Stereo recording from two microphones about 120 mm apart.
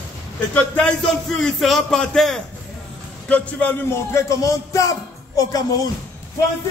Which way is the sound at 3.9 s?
25° left (ahead or behind).